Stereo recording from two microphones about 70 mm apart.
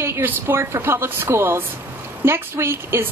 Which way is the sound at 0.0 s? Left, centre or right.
Right.